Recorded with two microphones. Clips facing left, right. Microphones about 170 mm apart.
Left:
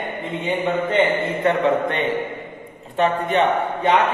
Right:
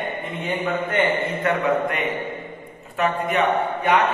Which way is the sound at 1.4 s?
30° left (ahead or behind).